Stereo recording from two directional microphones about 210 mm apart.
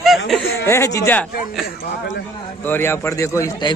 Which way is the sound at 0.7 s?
15° left (ahead or behind).